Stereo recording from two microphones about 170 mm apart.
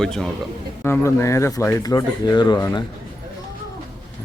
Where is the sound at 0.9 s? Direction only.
15° left (ahead or behind).